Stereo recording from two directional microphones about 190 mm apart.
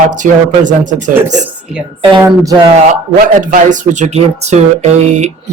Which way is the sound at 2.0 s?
25° right (ahead or behind).